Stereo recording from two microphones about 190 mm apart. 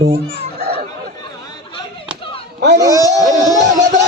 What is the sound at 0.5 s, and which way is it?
Chatter, 55° right (ahead or behind).